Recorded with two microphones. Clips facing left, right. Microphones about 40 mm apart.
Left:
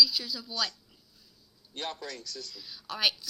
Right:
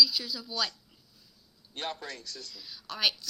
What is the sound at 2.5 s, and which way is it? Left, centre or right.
Speech, centre.